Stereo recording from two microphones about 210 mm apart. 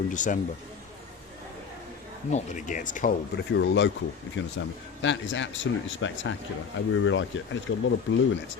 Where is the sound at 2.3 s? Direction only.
35° left (ahead or behind).